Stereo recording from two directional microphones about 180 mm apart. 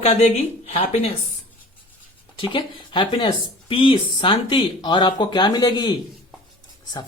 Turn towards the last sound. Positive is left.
turn(degrees=25)  # may be behind; listen again after turning